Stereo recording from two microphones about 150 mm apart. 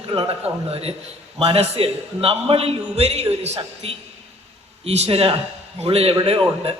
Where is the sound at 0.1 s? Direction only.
35° right (ahead or behind).